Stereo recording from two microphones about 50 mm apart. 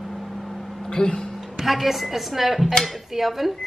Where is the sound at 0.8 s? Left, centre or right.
Centre.